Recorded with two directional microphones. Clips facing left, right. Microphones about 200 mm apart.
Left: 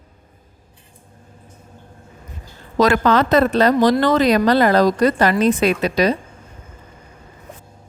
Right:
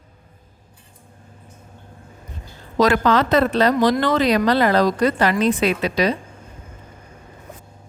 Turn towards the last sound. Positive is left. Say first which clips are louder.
# left 2 dB
turn(degrees=45)  # may be behind; listen again after turning